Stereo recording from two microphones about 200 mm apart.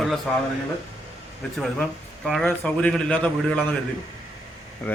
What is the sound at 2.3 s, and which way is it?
A man's voice, 5° left (ahead or behind).